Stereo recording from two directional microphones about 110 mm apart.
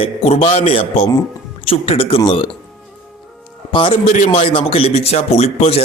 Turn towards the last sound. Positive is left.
turn(degrees=75)  # may be behind; listen again after turning